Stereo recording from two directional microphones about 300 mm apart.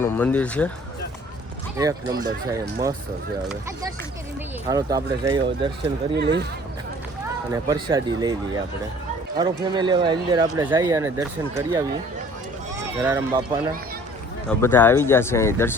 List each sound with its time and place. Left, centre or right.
0.0 s speech: centre
1.8 s speech: centre
6.1 s speech: right
7.5 s speech: centre
13.1 s speech: centre
14.6 s speech: centre